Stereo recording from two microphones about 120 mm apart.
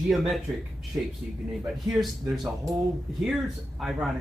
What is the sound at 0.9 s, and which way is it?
Speech, 25° right (ahead or behind).